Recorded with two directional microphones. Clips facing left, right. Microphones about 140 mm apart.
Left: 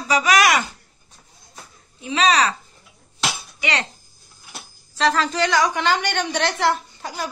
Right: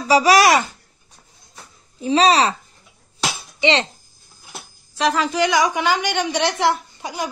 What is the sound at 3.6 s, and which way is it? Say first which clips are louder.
Speech: right 7 dB; 25° right (ahead or behind).